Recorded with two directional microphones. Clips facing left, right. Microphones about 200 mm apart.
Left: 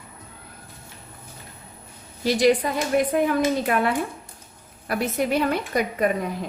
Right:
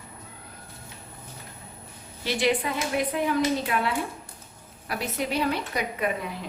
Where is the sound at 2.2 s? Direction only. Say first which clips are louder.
Left 6 dB; 40° left (ahead or behind).